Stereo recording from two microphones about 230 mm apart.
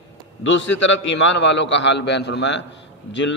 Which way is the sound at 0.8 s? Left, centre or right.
Left.